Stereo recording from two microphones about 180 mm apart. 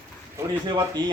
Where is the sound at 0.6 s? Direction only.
25° right (ahead or behind).